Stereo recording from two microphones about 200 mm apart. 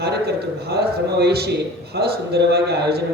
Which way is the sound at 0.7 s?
55° right (ahead or behind).